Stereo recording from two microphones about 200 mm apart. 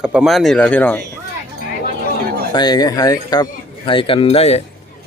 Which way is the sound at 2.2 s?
50° right (ahead or behind).